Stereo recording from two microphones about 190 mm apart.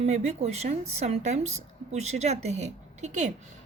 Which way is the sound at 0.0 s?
35° right (ahead or behind).